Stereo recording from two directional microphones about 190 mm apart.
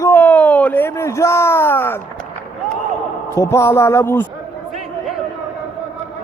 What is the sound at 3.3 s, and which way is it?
Speech, 15° left (ahead or behind).